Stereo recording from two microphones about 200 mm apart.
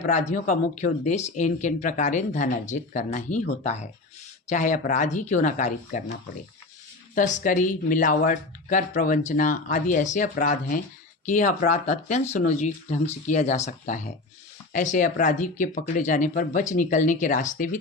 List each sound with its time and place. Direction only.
0.0 s speech: 40° left (ahead or behind)
7.2 s speech: 40° left (ahead or behind)